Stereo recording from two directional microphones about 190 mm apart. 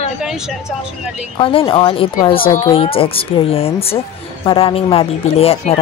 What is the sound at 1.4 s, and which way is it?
Speech, 30° left (ahead or behind).